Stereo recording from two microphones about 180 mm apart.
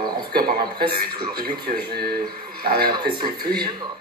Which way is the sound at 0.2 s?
55° right (ahead or behind).